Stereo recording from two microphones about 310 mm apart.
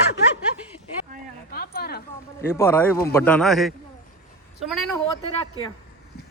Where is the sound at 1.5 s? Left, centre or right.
Left.